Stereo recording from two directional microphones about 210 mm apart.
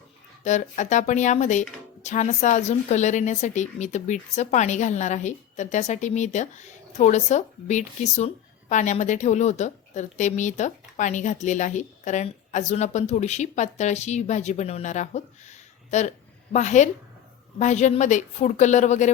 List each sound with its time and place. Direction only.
0.4 s a woman's voice: 35° left (ahead or behind)